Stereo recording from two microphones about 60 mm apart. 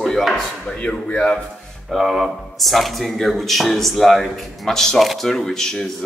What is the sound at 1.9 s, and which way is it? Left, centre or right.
Speech, centre.